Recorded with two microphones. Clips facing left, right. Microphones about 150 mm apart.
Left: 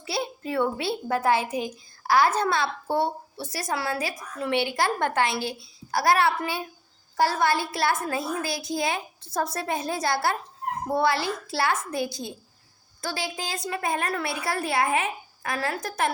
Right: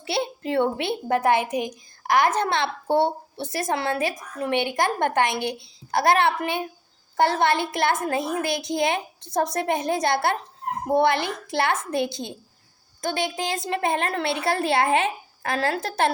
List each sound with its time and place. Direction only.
0.5 s a child's voice: 25° right (ahead or behind)